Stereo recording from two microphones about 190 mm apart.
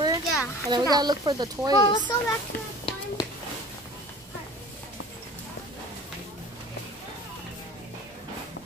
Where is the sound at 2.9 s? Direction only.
30° left (ahead or behind).